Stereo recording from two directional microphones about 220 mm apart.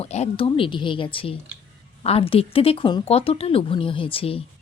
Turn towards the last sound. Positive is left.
turn(degrees=25)  # may be behind; listen again after turning